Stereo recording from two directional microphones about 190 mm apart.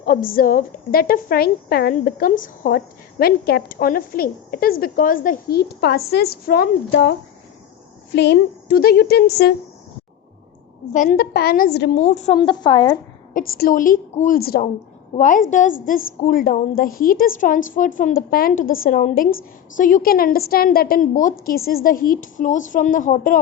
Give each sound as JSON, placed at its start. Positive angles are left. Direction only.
{"t": 0.0, "sound": "a woman's voice", "side_deg": 50}
{"t": 8.1, "sound": "a woman's voice", "side_deg": 65}
{"t": 10.9, "sound": "a woman's voice", "side_deg": 45}
{"t": 11.9, "sound": "a woman's voice", "side_deg": 40}
{"t": 12.4, "sound": "a woman's voice", "side_deg": 25}
{"t": 13.3, "sound": "a woman's voice", "side_deg": 50}